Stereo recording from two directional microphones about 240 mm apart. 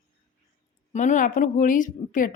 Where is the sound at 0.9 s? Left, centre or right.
Left.